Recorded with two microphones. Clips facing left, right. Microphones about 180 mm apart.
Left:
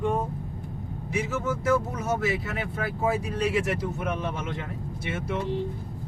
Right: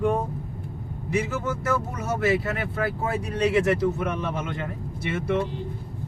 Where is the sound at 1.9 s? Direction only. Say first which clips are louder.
Right 3 dB; 65° right (ahead or behind).